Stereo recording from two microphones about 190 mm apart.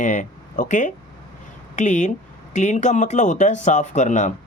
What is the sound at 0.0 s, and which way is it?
Speech, 40° left (ahead or behind).